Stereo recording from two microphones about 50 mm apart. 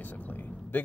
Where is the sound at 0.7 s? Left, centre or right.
Left.